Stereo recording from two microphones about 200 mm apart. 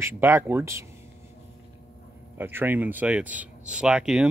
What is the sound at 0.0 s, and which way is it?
Speech, 10° right (ahead or behind).